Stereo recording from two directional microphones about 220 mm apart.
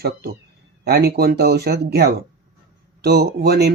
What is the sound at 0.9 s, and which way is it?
Speech, 45° right (ahead or behind).